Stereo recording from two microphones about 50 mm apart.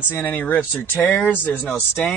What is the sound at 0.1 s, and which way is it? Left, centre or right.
Speech, left.